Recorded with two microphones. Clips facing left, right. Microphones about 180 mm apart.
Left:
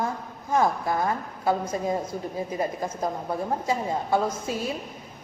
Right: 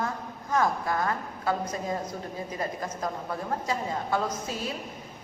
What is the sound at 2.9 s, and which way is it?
A woman's voice, 25° left (ahead or behind).